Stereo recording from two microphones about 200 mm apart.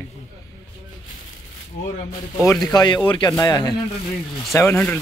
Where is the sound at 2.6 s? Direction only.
20° left (ahead or behind).